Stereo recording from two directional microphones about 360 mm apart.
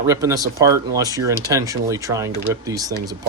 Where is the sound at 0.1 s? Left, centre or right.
Centre.